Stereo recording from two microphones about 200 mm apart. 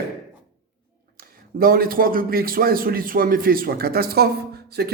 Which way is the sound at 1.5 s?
45° right (ahead or behind).